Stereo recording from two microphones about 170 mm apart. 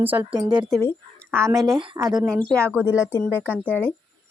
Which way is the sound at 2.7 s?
10° right (ahead or behind).